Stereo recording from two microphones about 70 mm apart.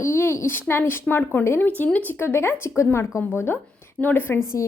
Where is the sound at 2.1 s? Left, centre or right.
Left.